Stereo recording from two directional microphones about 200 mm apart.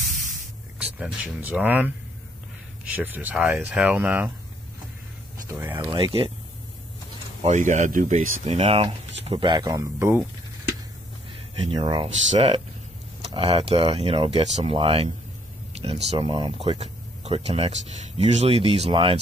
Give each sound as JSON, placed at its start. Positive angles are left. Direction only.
{"t": 0.7, "sound": "speech", "side_deg": -5}
{"t": 5.5, "sound": "speech", "side_deg": -15}
{"t": 7.4, "sound": "speech", "side_deg": -35}
{"t": 11.5, "sound": "speech", "side_deg": -25}